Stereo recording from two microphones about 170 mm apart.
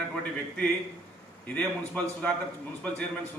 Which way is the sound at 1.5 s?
10° left (ahead or behind).